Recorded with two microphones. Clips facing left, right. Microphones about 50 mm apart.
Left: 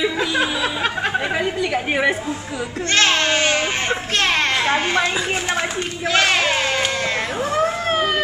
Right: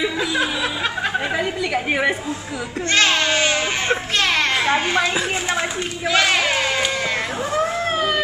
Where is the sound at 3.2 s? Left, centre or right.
Left.